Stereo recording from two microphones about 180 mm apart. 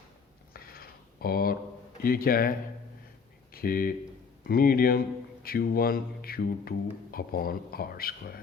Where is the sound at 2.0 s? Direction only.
55° left (ahead or behind).